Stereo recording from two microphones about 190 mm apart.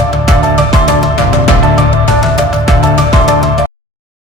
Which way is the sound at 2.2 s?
Centre (ahead or behind).